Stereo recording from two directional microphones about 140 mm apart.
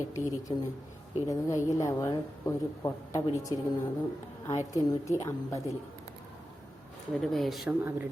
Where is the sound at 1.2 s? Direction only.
20° left (ahead or behind).